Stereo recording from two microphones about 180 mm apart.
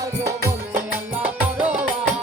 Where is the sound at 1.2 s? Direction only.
10° right (ahead or behind).